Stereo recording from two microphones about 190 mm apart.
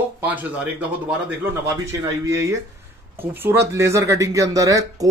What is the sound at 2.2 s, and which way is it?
Speech, 15° right (ahead or behind).